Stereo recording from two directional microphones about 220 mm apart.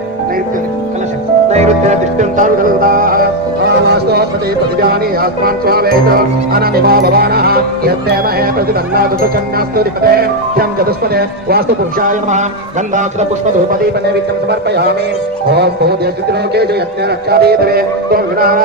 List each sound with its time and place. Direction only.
1.5 s music: 30° right (ahead or behind)
4.8 s speech: 45° right (ahead or behind)
14.7 s speech: 50° right (ahead or behind)
17.2 s speech: 45° right (ahead or behind)